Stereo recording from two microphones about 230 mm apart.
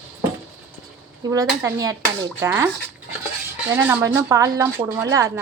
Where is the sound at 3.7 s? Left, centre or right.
Centre.